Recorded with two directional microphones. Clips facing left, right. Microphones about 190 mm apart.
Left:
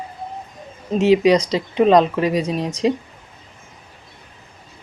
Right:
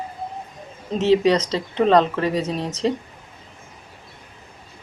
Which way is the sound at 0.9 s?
10° left (ahead or behind).